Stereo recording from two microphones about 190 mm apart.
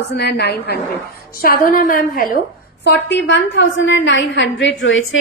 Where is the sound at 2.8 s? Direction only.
70° left (ahead or behind); by 5.1 s 85° left.